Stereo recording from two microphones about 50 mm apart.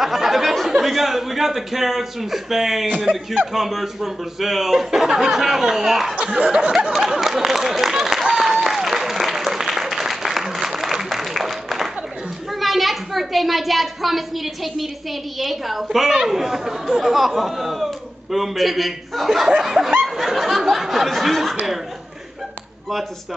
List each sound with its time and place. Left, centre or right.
0.0 s a child's voice: centre
6.9 s a sound: centre
8.6 s applause: centre
12.4 s a child's voice: centre
20.0 s snicker: centre